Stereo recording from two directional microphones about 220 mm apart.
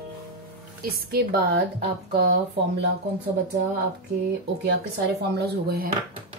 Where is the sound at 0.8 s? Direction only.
45° right (ahead or behind).